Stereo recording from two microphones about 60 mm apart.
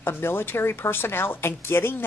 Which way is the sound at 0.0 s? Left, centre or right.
Left.